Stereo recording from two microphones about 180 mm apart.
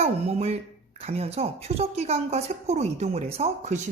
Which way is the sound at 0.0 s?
35° right (ahead or behind).